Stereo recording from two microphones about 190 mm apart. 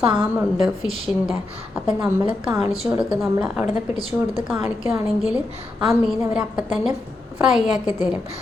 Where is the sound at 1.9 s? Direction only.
25° right (ahead or behind).